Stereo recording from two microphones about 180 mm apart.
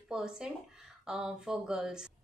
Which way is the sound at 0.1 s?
5° right (ahead or behind).